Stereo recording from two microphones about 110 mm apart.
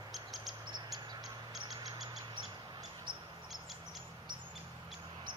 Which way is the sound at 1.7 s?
35° right (ahead or behind).